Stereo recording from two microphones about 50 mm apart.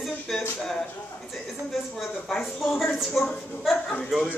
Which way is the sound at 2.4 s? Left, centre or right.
Centre.